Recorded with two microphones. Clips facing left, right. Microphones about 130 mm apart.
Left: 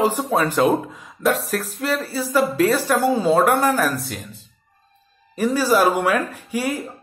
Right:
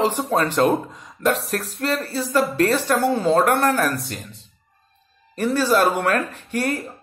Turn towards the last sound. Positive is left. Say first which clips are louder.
# even
turn(degrees=10)  # may be behind; listen again after turning